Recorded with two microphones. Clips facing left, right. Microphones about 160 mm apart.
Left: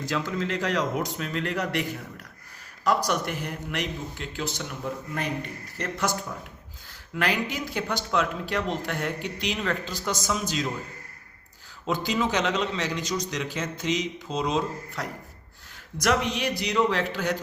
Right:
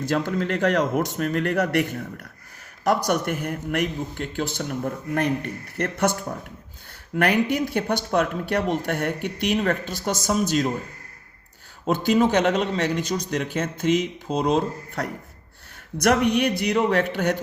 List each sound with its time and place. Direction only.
0.0 s speech: 55° right (ahead or behind)
7.2 s speech: 55° right (ahead or behind)
11.9 s speech: 50° right (ahead or behind)